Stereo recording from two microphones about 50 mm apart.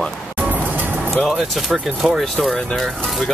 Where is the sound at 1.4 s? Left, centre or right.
Centre.